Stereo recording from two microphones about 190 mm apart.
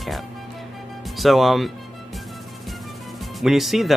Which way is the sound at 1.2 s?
Centre (ahead or behind).